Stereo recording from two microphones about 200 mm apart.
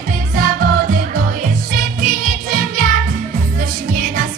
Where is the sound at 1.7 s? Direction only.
45° right (ahead or behind).